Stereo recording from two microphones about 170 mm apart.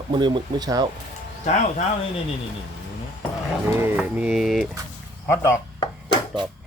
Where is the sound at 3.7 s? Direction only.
15° right (ahead or behind).